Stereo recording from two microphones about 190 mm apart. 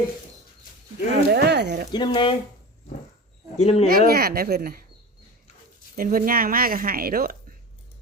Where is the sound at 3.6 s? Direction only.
35° left (ahead or behind).